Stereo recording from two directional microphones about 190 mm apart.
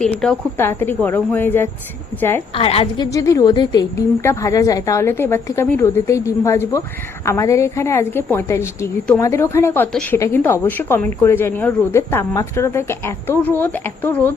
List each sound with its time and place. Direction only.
0.0 s a woman's voice: 5° left (ahead or behind)
2.5 s a woman's voice: 30° left (ahead or behind); by 14.3 s 10° left (ahead or behind)